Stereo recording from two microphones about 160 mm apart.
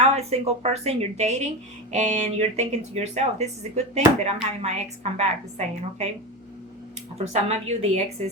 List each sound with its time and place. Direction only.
0.0 s a woman's voice: 40° right (ahead or behind)
7.4 s a woman's voice: 40° right (ahead or behind)